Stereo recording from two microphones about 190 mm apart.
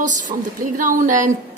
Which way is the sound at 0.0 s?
40° right (ahead or behind).